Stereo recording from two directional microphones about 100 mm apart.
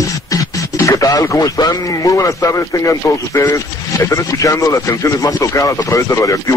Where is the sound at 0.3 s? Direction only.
35° left (ahead or behind).